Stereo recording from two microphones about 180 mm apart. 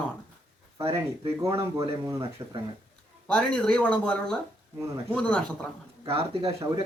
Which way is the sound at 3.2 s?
5° left (ahead or behind).